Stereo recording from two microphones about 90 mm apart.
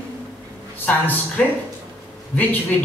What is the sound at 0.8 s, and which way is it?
A man's voice, 20° left (ahead or behind).